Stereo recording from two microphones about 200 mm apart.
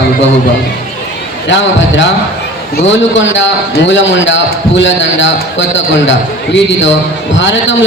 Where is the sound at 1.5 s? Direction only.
65° left (ahead or behind).